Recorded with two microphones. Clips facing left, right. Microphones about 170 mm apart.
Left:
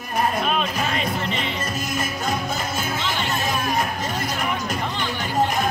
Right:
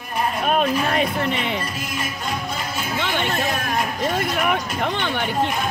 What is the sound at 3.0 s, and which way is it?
Music, 60° right (ahead or behind).